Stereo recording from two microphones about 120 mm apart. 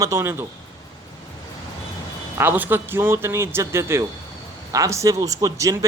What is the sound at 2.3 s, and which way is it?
Speech, 15° right (ahead or behind).